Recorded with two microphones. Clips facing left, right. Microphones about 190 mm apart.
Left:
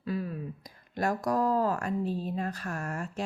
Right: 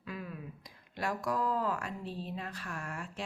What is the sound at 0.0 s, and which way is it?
Speech, 35° left (ahead or behind).